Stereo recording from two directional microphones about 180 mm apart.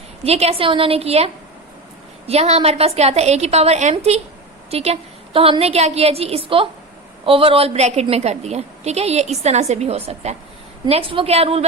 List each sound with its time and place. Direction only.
0.3 s a woman's voice: 35° right (ahead or behind)